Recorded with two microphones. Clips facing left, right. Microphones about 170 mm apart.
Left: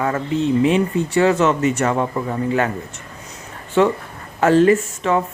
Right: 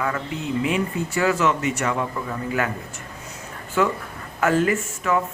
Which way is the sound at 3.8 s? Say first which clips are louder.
Left 6 dB; 30° left (ahead or behind).